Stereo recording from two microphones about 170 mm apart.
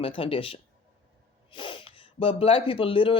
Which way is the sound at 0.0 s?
30° left (ahead or behind).